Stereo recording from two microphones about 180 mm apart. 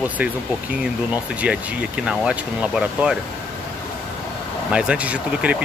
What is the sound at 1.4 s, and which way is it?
Speech, 5° right (ahead or behind).